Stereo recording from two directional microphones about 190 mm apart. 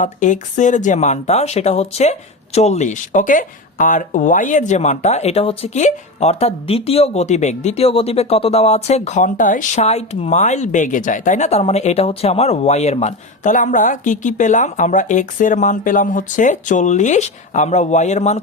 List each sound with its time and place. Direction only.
0.0 s speech: 40° left (ahead or behind)